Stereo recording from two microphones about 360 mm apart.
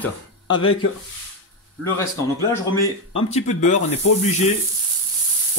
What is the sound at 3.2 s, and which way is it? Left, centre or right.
Speech, centre.